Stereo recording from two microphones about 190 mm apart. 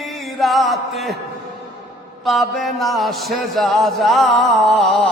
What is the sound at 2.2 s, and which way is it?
A man's voice, centre (ahead or behind).